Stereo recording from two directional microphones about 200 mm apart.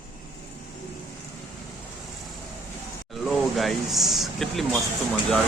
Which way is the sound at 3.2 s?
Centre (ahead or behind).